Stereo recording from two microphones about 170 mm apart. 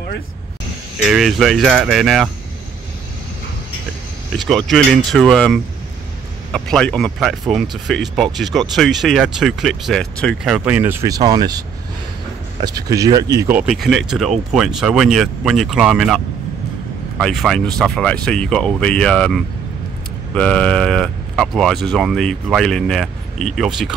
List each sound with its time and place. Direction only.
1.0 s speech: centre (ahead or behind)
4.4 s speech: centre (ahead or behind); by 13.6 s 20° right (ahead or behind)
13.6 s speech: centre (ahead or behind)
17.2 s speech: centre (ahead or behind)